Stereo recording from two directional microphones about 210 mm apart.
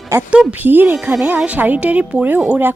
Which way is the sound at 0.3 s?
5° right (ahead or behind).